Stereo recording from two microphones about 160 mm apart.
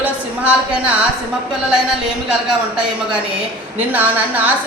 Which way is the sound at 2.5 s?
5° right (ahead or behind).